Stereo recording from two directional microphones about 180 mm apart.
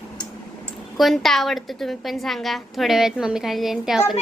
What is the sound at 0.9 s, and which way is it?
A woman's voice, centre (ahead or behind).